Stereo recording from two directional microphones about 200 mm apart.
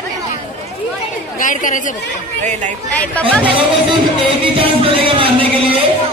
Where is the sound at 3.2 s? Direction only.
5° left (ahead or behind).